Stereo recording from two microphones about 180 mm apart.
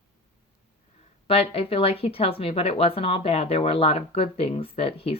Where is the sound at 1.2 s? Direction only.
30° left (ahead or behind).